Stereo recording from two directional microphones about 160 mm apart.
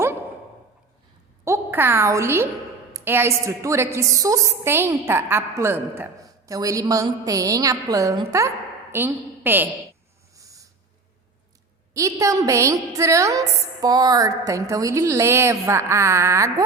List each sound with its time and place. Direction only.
1.5 s a woman's voice: 15° right (ahead or behind)
10.3 s owl: 20° right (ahead or behind)
11.9 s a woman's voice: 20° right (ahead or behind)